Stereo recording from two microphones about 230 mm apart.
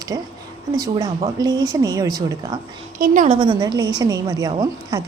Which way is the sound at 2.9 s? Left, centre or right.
Right.